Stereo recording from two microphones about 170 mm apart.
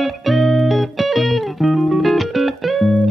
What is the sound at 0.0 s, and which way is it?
Music, centre (ahead or behind).